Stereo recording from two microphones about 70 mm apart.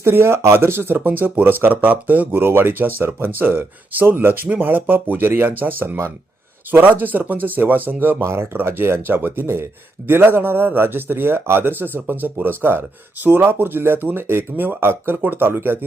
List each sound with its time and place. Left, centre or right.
0.0 s speech: right